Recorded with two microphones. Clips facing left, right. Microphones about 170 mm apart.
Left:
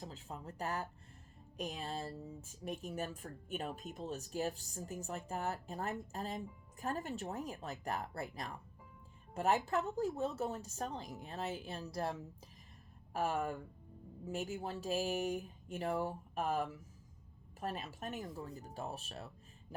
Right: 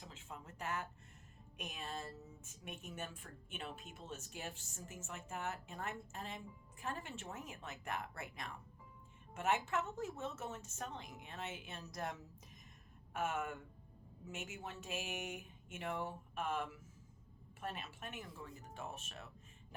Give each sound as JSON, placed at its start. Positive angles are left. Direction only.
{"t": 0.0, "sound": "a woman's voice", "side_deg": 35}